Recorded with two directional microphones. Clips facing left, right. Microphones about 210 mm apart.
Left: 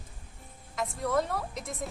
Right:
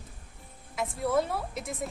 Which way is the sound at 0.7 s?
5° right (ahead or behind).